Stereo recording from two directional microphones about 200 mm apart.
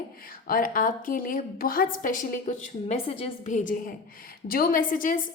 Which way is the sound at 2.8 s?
30° left (ahead or behind).